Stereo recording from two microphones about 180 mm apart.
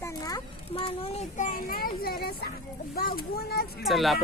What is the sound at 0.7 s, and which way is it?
A child's voice, 35° left (ahead or behind).